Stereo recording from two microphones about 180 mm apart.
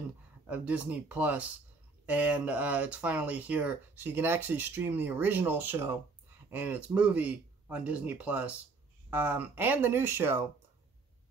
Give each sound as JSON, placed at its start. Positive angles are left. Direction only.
{"t": 0.5, "sound": "speech", "side_deg": -10}